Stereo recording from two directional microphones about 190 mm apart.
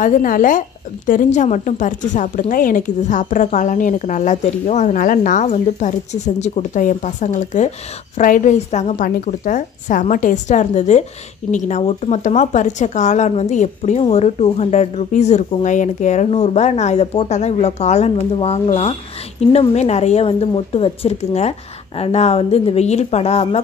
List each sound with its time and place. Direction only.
0.0 s a woman's voice: 45° left (ahead or behind)